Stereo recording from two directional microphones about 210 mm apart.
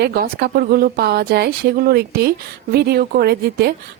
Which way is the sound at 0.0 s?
50° right (ahead or behind).